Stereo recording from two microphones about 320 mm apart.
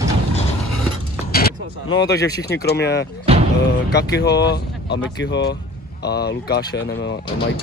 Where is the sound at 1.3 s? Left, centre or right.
Left.